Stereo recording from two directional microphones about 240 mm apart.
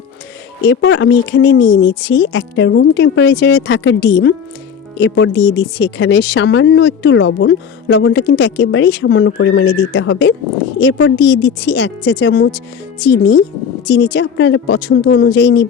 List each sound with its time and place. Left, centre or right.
0.6 s speech: left